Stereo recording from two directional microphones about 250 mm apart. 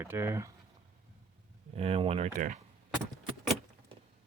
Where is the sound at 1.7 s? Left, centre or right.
Right.